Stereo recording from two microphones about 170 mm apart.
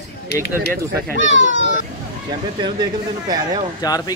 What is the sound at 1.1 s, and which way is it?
Speech, 90° left.